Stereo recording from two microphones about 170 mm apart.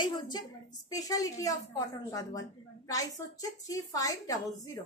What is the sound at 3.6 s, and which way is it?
A woman's voice, 20° left (ahead or behind).